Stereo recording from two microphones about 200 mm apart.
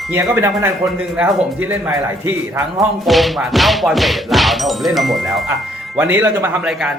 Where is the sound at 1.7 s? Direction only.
10° right (ahead or behind).